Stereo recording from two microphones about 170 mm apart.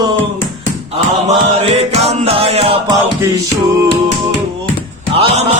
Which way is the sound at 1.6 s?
40° right (ahead or behind).